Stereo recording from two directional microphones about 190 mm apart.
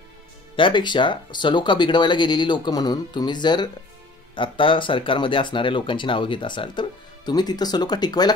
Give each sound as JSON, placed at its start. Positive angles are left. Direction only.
{"t": 0.6, "sound": "speech", "side_deg": 25}